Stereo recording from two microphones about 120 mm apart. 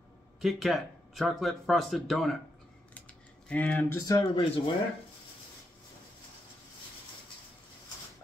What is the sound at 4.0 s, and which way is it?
Speech, 30° left (ahead or behind).